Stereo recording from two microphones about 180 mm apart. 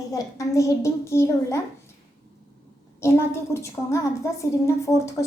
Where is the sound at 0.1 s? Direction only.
20° left (ahead or behind).